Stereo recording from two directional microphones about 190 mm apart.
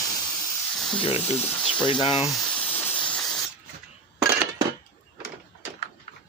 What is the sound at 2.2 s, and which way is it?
Hiss, 5° left (ahead or behind).